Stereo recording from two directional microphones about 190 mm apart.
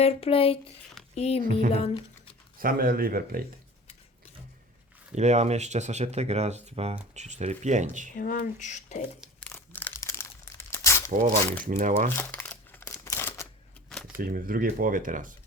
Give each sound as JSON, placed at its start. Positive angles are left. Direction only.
{"t": 0.0, "sound": "speech", "side_deg": 30}
{"t": 2.6, "sound": "speech", "side_deg": -50}
{"t": 5.1, "sound": "speech", "side_deg": -35}
{"t": 8.1, "sound": "speech", "side_deg": 45}
{"t": 9.5, "sound": "crumpling", "side_deg": 10}
{"t": 11.1, "sound": "speech", "side_deg": -45}
{"t": 12.1, "sound": "crumpling", "side_deg": 10}
{"t": 14.2, "sound": "speech", "side_deg": -50}